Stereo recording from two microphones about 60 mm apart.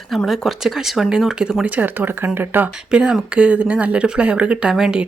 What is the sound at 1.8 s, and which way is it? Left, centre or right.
Speech, right.